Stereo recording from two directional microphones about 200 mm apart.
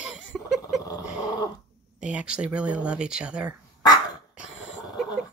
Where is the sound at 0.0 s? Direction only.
5° right (ahead or behind).